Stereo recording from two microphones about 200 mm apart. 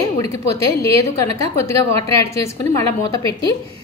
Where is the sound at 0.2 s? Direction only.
15° left (ahead or behind).